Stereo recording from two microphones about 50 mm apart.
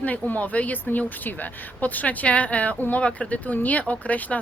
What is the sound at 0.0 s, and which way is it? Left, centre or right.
A woman's voice, left.